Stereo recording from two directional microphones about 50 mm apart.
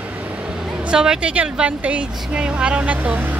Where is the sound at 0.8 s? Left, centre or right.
Centre.